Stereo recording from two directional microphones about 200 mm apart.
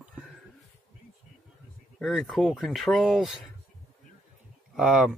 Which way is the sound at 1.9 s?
Centre (ahead or behind).